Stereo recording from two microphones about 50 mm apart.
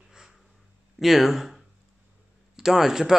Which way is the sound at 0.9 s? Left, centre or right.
Centre.